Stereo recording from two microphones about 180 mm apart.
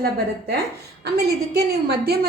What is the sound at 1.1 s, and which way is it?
A woman's voice, 60° right (ahead or behind).